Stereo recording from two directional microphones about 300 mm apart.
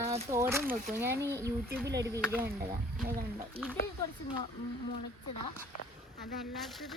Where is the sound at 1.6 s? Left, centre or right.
Right.